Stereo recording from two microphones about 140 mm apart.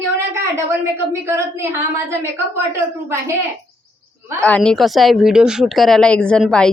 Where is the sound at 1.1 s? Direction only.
20° right (ahead or behind).